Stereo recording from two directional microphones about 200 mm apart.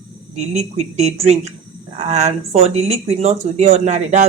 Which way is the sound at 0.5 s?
35° right (ahead or behind).